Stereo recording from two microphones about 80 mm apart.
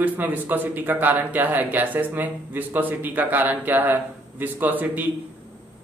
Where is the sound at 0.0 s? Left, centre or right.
Right.